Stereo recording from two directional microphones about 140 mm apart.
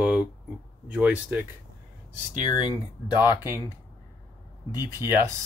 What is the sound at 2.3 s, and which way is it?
Speech, 65° right (ahead or behind).